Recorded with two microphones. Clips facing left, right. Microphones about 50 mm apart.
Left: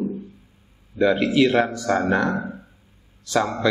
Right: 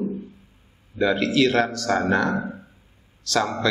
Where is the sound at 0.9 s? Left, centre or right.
Centre.